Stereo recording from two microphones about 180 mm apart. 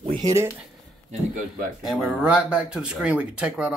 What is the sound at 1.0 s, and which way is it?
Speech, 50° right (ahead or behind).